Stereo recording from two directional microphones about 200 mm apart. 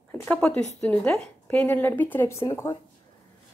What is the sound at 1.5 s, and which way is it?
Speech, 10° left (ahead or behind).